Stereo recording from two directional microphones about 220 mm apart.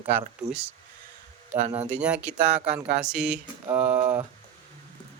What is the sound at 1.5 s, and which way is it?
Speech, 30° right (ahead or behind).